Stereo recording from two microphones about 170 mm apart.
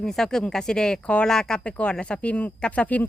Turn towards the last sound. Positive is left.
turn(degrees=10)  # may be behind; listen again after turning